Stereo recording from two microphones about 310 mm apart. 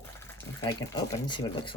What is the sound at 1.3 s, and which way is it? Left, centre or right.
Speech, centre.